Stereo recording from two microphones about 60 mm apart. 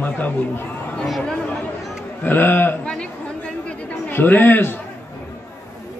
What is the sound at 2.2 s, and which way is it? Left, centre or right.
Speech, left.